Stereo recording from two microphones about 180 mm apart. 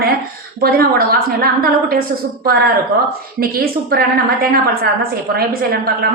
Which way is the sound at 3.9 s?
60° right (ahead or behind).